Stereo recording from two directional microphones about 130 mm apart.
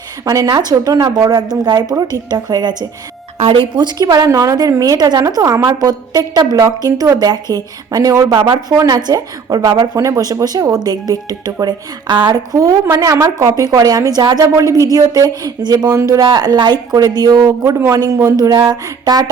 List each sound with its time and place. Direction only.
0.3 s speech: 30° right (ahead or behind)
3.3 s a woman's voice: 45° right (ahead or behind); by 19.2 s 30° right (ahead or behind)